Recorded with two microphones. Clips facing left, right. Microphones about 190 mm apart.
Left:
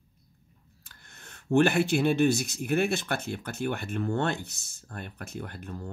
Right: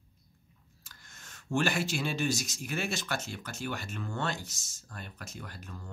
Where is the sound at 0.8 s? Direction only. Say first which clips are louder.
Left 3 dB; 60° left (ahead or behind).